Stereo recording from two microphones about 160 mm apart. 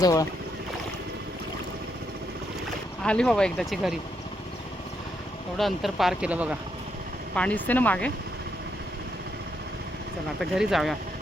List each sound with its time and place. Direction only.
0.0 s speech: 20° left (ahead or behind)
3.0 s speech: 5° left (ahead or behind)
5.5 s speech: centre (ahead or behind)
7.3 s speech: 10° left (ahead or behind)
10.4 s speech: centre (ahead or behind)